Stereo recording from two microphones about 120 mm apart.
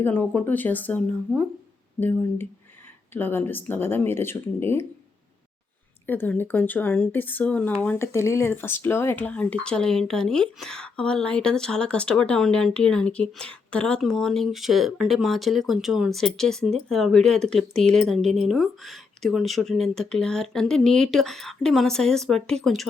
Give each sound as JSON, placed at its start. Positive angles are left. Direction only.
{"t": 0.0, "sound": "speech", "side_deg": 15}
{"t": 1.3, "sound": "speech", "side_deg": 0}
{"t": 2.0, "sound": "speech", "side_deg": 15}
{"t": 6.1, "sound": "speech", "side_deg": 15}